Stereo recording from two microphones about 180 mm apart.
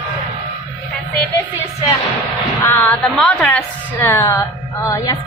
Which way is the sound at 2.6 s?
10° left (ahead or behind).